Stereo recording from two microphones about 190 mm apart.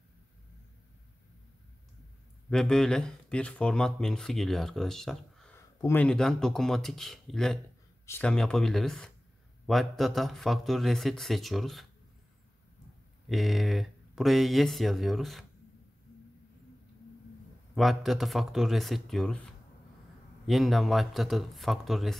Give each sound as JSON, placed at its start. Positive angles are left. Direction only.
{"t": 2.5, "sound": "speech", "side_deg": 5}
{"t": 13.3, "sound": "speech", "side_deg": 0}
{"t": 17.7, "sound": "speech", "side_deg": 0}